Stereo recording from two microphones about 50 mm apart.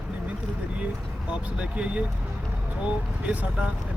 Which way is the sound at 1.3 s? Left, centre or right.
Right.